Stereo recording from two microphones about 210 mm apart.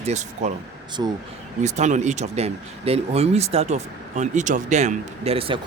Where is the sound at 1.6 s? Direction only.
35° right (ahead or behind).